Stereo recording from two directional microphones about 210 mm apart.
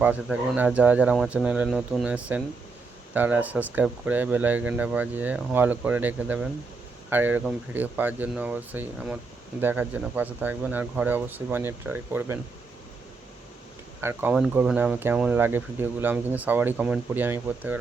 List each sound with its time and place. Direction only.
0.0 s speech: 5° right (ahead or behind)
14.0 s speech: 10° right (ahead or behind)